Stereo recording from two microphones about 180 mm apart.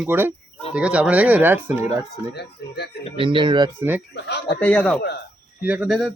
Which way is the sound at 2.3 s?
65° left (ahead or behind).